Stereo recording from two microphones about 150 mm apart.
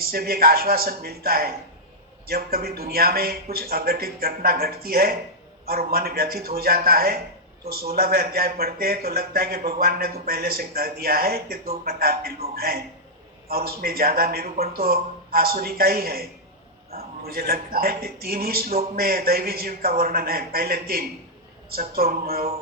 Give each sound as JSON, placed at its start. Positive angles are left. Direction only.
{"t": 0.0, "sound": "a man's voice", "side_deg": -90}